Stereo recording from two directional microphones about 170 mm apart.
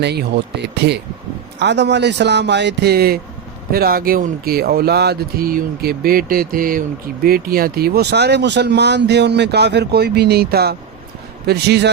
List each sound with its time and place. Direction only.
0.0 s speech: 75° right (ahead or behind)
1.5 s speech: 90° right